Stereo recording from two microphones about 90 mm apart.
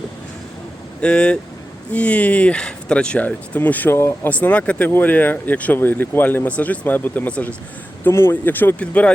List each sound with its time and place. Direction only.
1.0 s speech: 10° left (ahead or behind); by 4.3 s 25° left (ahead or behind)
4.3 s speech: 15° left (ahead or behind)
8.0 s speech: 25° left (ahead or behind)